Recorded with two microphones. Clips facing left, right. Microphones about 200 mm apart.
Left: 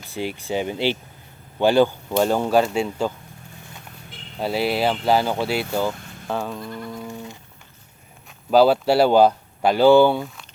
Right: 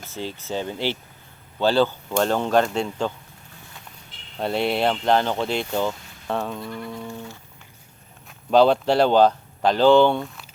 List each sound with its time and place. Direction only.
0.0 s speech: 15° left (ahead or behind)
4.4 s speech: 5° left (ahead or behind)
8.3 s speech: 5° left (ahead or behind)